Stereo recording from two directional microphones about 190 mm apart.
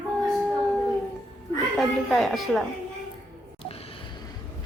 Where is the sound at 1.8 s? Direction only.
Centre (ahead or behind).